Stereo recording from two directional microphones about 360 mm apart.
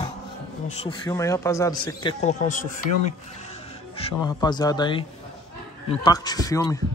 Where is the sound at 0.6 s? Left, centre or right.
Centre.